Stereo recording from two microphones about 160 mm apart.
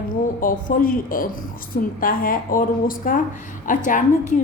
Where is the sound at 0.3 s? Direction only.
60° left (ahead or behind).